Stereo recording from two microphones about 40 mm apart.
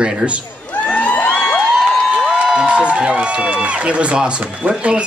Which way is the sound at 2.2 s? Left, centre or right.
Centre.